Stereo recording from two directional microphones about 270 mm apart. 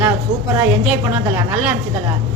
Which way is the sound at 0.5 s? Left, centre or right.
Centre.